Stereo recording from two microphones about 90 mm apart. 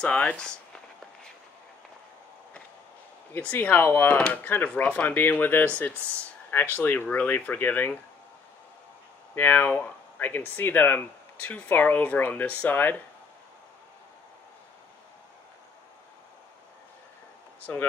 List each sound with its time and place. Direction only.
0.0 s a sound: 15° left (ahead or behind)
3.3 s speech: 20° left (ahead or behind)
9.3 s speech: 25° left (ahead or behind)